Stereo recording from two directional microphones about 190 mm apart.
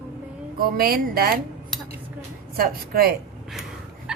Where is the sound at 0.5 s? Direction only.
55° right (ahead or behind).